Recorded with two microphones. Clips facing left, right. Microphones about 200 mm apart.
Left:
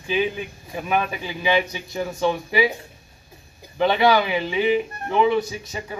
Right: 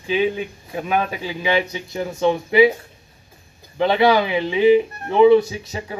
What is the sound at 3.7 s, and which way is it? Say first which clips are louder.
A man's voice: right 2 dB; 25° right (ahead or behind).